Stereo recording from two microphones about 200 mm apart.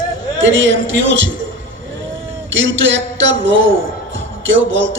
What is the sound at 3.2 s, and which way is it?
A man's voice, 70° right (ahead or behind).